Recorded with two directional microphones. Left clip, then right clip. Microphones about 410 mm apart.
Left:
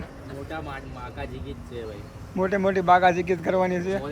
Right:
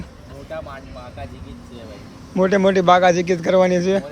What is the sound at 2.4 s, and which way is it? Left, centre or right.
Speech, centre.